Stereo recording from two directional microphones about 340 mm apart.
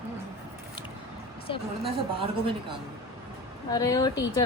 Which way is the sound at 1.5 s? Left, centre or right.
Centre.